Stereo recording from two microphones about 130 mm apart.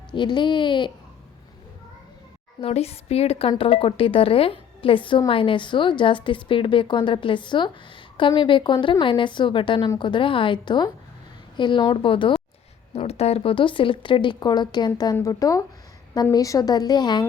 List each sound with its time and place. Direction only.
0.1 s a woman's voice: 35° left (ahead or behind)
2.6 s a woman's voice: 50° left (ahead or behind)
12.9 s a woman's voice: 55° left (ahead or behind); by 17.2 s 35° left (ahead or behind)